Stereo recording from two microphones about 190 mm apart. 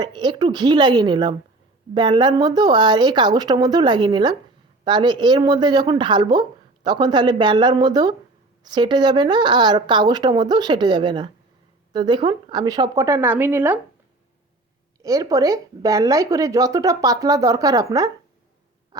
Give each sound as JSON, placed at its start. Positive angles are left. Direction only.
{"t": 0.0, "sound": "a woman's voice", "side_deg": -25}
{"t": 15.0, "sound": "speech", "side_deg": -20}